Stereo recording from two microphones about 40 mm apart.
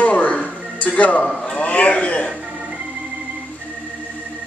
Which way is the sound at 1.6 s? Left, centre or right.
Left.